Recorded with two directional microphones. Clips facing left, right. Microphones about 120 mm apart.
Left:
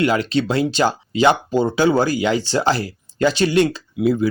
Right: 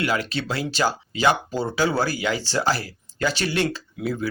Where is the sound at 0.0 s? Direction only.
25° left (ahead or behind).